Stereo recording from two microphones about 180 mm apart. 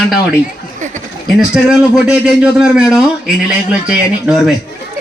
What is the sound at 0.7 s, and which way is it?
Speech, 45° right (ahead or behind).